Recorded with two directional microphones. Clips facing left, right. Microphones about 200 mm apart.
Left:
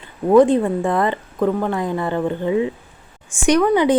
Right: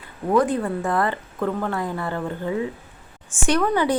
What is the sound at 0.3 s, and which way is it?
A woman's voice, 25° left (ahead or behind).